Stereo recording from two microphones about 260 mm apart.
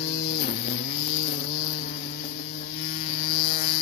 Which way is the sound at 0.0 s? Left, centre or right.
Left.